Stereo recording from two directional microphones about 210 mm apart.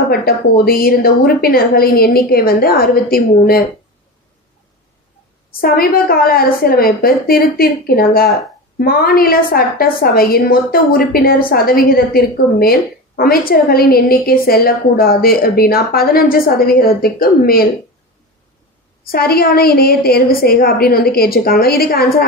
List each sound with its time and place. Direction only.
0.1 s a woman's voice: 45° left (ahead or behind)
5.5 s a woman's voice: 45° left (ahead or behind)
19.0 s a woman's voice: 45° left (ahead or behind)